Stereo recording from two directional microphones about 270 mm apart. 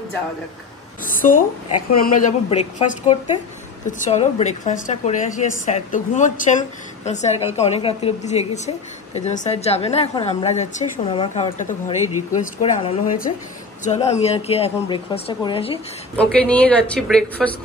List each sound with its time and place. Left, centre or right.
1.0 s a woman's voice: left
16.2 s a woman's voice: centre